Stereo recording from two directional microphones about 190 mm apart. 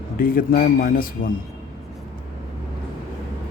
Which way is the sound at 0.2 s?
50° left (ahead or behind).